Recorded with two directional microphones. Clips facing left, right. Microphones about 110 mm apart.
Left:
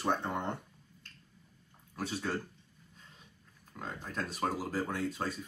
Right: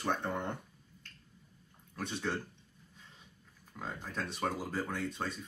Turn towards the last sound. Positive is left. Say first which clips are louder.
# left 2 dB
turn(degrees=5)  # may be behind; listen again after turning